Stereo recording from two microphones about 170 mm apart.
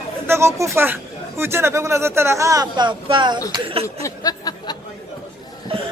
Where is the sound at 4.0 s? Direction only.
20° left (ahead or behind).